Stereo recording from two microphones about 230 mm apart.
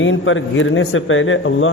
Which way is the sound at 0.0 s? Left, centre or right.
Left.